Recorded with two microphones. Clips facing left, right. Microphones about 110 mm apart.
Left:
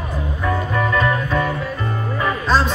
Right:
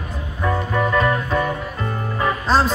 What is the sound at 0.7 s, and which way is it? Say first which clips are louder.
Music: right 1 dB; 30° right (ahead or behind).